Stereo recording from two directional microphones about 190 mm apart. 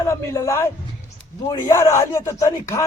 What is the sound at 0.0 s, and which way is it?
Speech, 15° left (ahead or behind).